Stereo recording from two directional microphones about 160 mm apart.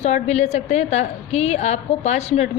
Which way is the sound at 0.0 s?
45° left (ahead or behind).